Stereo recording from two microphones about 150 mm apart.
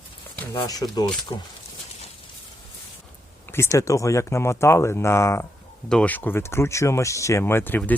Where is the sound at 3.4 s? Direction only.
15° left (ahead or behind).